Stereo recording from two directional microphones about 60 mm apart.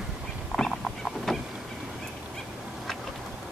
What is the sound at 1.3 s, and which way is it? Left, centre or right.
Vehicle, centre.